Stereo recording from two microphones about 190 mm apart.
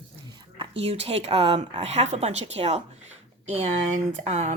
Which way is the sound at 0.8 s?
30° right (ahead or behind).